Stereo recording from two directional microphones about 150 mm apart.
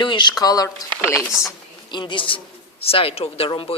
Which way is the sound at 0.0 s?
30° left (ahead or behind).